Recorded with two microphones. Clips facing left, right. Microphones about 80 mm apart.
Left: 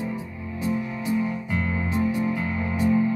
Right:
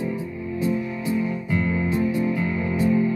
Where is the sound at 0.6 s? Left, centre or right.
Left.